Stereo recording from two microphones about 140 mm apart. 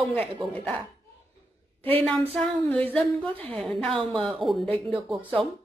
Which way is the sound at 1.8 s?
40° right (ahead or behind).